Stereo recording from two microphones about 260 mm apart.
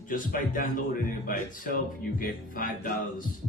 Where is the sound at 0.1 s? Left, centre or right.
Left.